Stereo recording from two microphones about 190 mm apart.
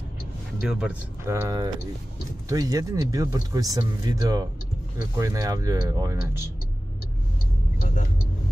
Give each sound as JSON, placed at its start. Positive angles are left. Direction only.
{"t": 0.6, "sound": "speech", "side_deg": -5}
{"t": 1.3, "sound": "speech", "side_deg": -15}